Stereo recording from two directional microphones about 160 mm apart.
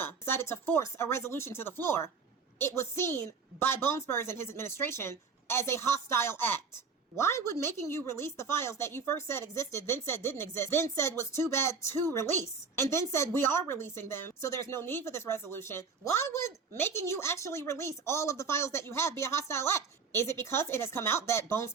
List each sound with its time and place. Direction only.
0.0 s a woman's voice: 15° left (ahead or behind)